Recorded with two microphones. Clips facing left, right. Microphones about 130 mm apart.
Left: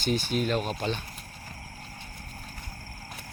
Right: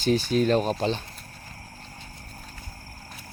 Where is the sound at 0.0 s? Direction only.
35° right (ahead or behind).